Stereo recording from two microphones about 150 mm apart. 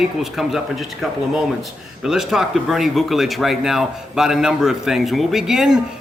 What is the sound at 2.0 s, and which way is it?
A man's voice, 5° right (ahead or behind).